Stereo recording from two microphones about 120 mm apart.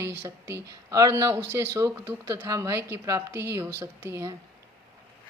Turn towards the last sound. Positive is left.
turn(degrees=-20)  # may be behind; listen again after turning